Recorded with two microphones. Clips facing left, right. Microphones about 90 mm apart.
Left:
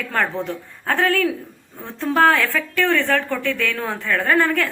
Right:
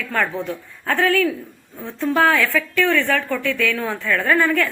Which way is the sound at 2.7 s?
20° left (ahead or behind).